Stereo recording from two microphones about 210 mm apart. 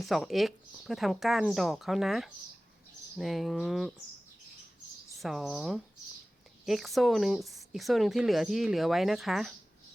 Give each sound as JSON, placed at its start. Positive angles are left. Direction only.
{"t": 0.0, "sound": "speech", "side_deg": 0}
{"t": 5.1, "sound": "speech", "side_deg": 0}